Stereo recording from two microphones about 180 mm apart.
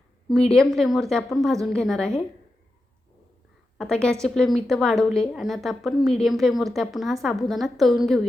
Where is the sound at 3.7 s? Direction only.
5° left (ahead or behind).